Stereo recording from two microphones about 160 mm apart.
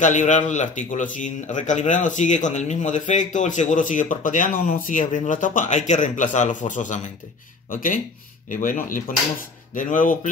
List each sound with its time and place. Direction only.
0.0 s a man's voice: 50° left (ahead or behind)